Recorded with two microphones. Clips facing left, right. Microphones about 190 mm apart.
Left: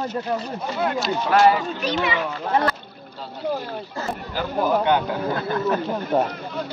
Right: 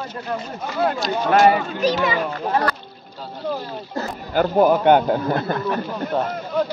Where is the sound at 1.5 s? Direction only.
40° right (ahead or behind).